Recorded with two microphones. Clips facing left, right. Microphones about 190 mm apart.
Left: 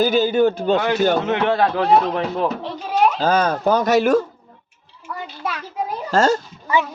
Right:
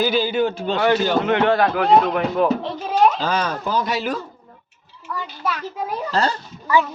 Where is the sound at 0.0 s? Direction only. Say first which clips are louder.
Left 3 dB; 45° left (ahead or behind).